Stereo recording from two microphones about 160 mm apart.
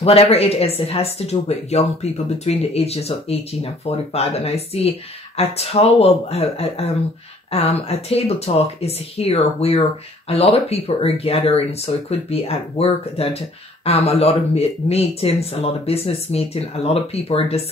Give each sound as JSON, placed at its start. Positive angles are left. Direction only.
{"t": 0.0, "sound": "speech", "side_deg": 40}